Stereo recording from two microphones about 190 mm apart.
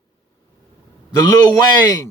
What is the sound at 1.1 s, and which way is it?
Speech, 20° left (ahead or behind).